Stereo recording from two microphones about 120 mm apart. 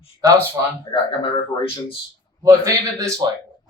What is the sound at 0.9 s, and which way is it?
Speech, 45° left (ahead or behind).